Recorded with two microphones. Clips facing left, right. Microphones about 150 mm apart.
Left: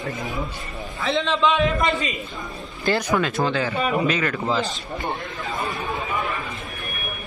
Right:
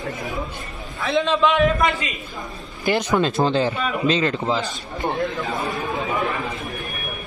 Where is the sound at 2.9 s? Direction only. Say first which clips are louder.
Right 2 dB; 25° right (ahead or behind).